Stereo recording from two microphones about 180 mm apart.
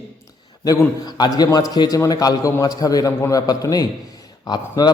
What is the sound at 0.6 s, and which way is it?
A man's voice, 20° left (ahead or behind).